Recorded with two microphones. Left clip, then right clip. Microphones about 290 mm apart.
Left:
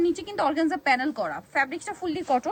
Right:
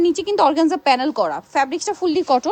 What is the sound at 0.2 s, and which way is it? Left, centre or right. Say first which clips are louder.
Speech: right 9 dB; centre.